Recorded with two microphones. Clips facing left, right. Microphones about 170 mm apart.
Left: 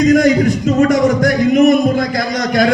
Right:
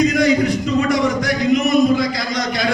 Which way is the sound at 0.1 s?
50° left (ahead or behind).